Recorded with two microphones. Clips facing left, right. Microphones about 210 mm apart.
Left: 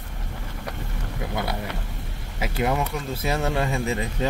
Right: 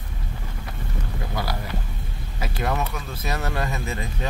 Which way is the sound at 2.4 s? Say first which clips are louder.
Left 3 dB; 20° left (ahead or behind).